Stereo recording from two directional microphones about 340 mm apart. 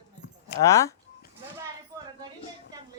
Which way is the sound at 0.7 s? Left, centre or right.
Centre.